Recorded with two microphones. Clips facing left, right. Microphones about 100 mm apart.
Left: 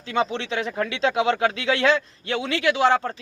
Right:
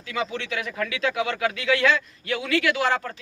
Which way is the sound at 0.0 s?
30° left (ahead or behind).